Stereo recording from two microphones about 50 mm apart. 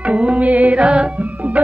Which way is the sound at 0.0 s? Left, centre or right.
Right.